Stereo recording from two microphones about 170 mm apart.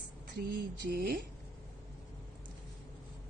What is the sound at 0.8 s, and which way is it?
Speech, 60° right (ahead or behind).